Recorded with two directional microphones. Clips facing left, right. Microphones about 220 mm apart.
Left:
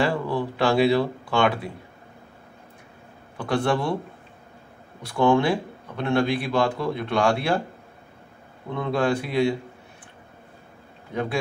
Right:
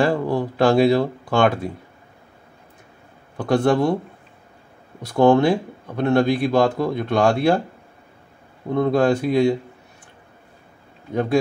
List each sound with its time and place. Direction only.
0.0 s speech: 45° right (ahead or behind)
3.3 s speech: 45° right (ahead or behind)
5.0 s speech: 40° right (ahead or behind)
8.7 s speech: 40° right (ahead or behind)